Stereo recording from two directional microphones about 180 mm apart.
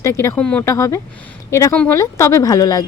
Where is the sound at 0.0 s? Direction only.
15° left (ahead or behind).